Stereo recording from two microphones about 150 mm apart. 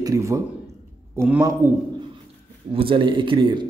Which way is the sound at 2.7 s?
35° right (ahead or behind).